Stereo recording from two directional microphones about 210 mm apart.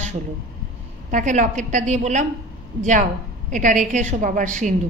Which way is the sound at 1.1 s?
35° right (ahead or behind).